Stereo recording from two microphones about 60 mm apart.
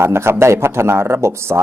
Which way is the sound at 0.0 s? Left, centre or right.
Right.